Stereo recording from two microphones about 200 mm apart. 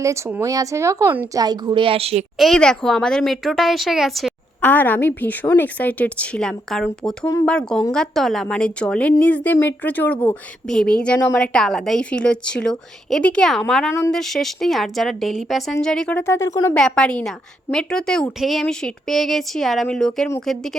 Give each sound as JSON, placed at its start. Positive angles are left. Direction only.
{"t": 0.0, "sound": "speech", "side_deg": -15}
{"t": 2.4, "sound": "a woman's voice", "side_deg": 5}
{"t": 16.7, "sound": "a woman's voice", "side_deg": 5}